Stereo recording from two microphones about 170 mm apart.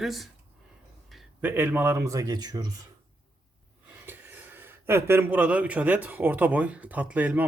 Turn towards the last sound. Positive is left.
turn(degrees=-10)  # may be behind; listen again after turning